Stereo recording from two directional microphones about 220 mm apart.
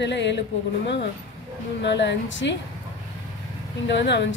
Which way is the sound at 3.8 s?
55° left (ahead or behind).